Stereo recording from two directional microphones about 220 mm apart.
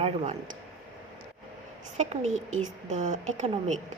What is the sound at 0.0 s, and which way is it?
Speech, 25° right (ahead or behind).